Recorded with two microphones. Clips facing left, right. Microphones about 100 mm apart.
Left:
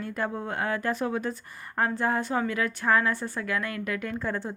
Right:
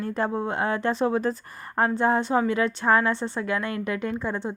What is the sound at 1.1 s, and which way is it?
Speech, 35° right (ahead or behind).